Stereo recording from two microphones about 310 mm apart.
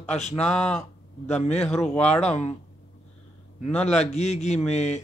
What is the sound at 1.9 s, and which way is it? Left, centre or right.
Speech, centre.